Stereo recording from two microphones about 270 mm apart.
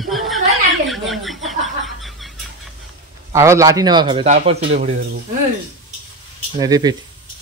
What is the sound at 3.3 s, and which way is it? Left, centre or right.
A man's voice, centre.